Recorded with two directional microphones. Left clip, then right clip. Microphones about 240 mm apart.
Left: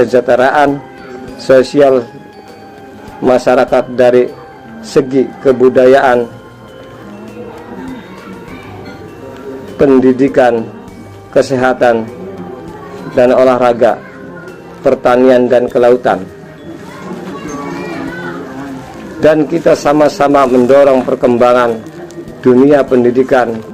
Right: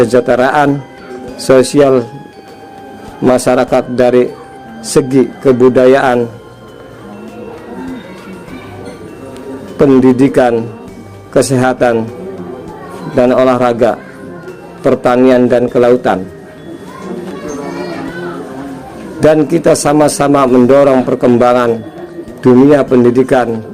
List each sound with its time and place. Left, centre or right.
0.0 s a man's voice: right
3.2 s a man's voice: right
9.7 s a man's voice: right
13.1 s a man's voice: right
19.2 s a man's voice: right